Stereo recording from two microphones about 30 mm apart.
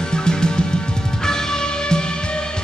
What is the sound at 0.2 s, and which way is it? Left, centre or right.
Music, left.